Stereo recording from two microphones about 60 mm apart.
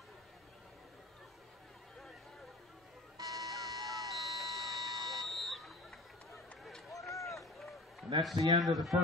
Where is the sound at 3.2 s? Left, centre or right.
Right.